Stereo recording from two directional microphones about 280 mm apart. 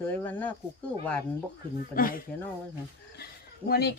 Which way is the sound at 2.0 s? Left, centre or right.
Left.